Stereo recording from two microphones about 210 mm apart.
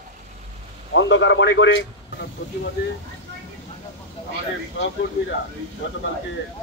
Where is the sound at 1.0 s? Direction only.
60° left (ahead or behind).